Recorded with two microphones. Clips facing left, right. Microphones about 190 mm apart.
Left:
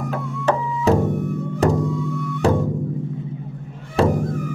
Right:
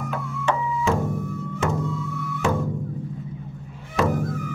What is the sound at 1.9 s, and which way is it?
Music, centre (ahead or behind).